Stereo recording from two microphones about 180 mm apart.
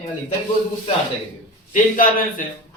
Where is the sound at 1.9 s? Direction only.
50° left (ahead or behind).